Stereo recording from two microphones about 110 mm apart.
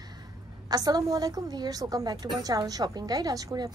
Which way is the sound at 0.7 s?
35° right (ahead or behind).